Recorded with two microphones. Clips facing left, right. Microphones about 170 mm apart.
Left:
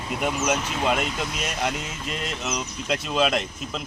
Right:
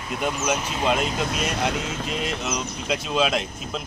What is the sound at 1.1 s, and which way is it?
Speech, 50° right (ahead or behind).